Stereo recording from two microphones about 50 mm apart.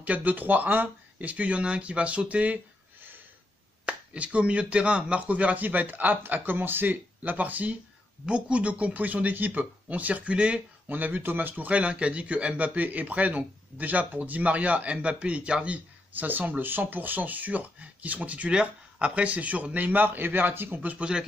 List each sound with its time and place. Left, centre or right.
0.0 s a man's voice: right
3.8 s a man's voice: right
10.9 s a man's voice: right
16.2 s speech: right
21.0 s a man's voice: centre